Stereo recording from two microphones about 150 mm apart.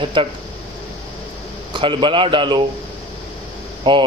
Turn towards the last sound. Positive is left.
turn(degrees=-35)  # may be behind; listen again after turning